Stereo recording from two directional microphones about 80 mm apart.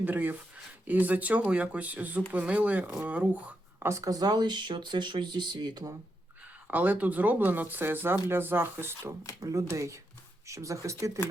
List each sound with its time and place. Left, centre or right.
0.0 s speech: right
3.8 s speech: right
6.7 s speech: right
9.4 s speech: right